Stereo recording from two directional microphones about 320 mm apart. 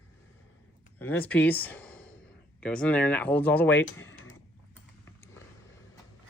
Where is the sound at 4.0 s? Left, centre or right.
Left.